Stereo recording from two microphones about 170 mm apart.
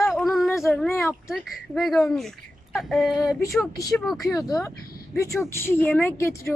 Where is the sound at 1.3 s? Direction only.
Centre (ahead or behind).